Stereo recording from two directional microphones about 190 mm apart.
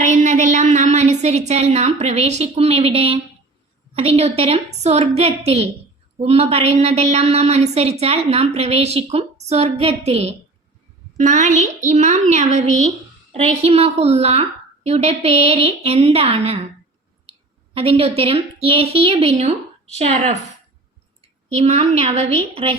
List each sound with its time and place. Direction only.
0.0 s a sound: 40° right (ahead or behind)
3.9 s a woman's voice: 30° right (ahead or behind)
17.7 s a woman's voice: 30° right (ahead or behind)